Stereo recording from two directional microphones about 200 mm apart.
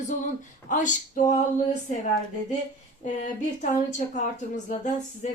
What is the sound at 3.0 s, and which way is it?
A woman's voice, 40° left (ahead or behind).